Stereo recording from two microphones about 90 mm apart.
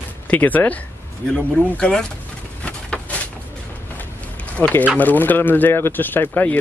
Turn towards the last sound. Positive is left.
turn(degrees=20)  # may be behind; listen again after turning